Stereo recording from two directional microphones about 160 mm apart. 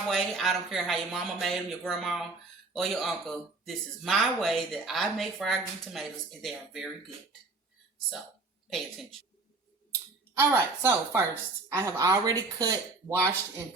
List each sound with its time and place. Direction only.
0.1 s speech: centre (ahead or behind)
8.7 s speech: centre (ahead or behind)
10.3 s speech: 15° right (ahead or behind)